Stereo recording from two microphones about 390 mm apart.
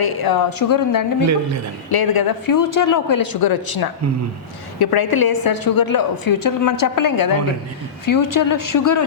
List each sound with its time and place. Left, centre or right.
0.0 s a woman's voice: left